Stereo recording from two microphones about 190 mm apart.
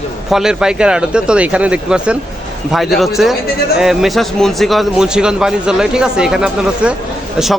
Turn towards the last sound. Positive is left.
turn(degrees=-5)  # may be behind; listen again after turning